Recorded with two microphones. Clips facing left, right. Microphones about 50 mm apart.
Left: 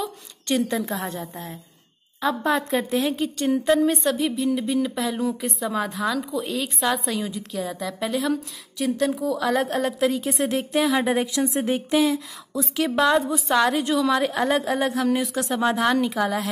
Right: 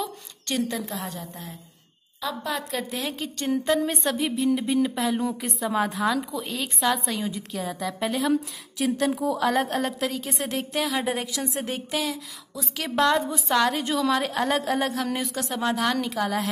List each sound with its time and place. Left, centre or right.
0.5 s speech: centre
2.9 s a woman's voice: centre
12.7 s a woman's voice: centre